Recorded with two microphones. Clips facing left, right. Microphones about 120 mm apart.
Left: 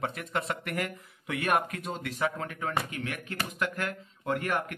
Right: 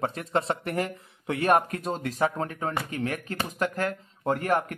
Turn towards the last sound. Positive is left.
turn(degrees=-40)  # may be behind; listen again after turning